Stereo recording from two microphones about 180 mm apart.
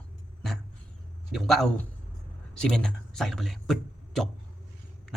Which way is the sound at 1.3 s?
Centre (ahead or behind).